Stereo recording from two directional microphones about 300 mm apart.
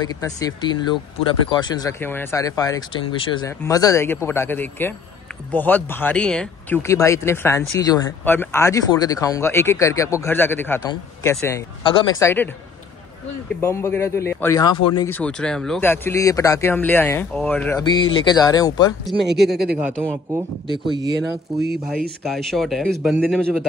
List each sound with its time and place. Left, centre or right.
0.2 s speech: centre
13.6 s speech: centre
19.2 s speech: right
19.5 s speech: centre
21.6 s speech: centre